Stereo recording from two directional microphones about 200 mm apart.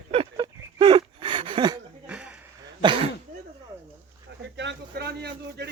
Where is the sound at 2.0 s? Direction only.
5° right (ahead or behind).